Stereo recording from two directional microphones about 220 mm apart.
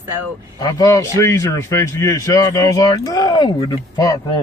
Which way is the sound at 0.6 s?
15° left (ahead or behind).